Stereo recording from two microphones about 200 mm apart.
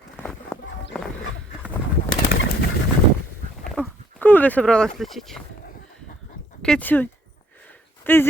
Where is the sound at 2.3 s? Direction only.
70° left (ahead or behind).